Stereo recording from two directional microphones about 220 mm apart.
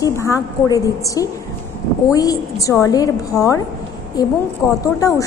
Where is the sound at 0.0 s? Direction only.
15° left (ahead or behind).